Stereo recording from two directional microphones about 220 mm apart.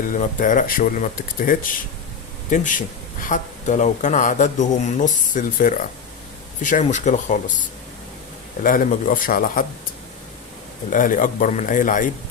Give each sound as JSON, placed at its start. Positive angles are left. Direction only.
{"t": 0.1, "sound": "speech", "side_deg": 35}
{"t": 8.6, "sound": "speech", "side_deg": 40}
{"t": 10.9, "sound": "speech", "side_deg": 35}